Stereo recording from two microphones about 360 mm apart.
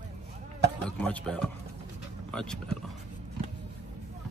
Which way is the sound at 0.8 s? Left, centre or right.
Centre.